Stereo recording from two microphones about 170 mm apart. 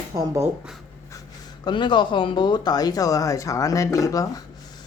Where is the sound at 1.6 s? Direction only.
25° left (ahead or behind).